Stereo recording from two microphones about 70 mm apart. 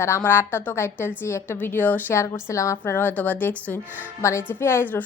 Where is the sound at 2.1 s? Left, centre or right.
Left.